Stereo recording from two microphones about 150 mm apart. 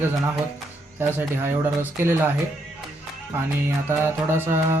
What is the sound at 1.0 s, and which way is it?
Mantra, 15° right (ahead or behind).